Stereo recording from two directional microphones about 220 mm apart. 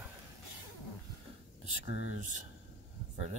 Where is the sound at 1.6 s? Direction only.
30° right (ahead or behind).